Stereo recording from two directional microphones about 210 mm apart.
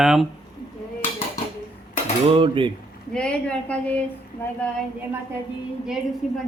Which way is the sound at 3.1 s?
5° left (ahead or behind).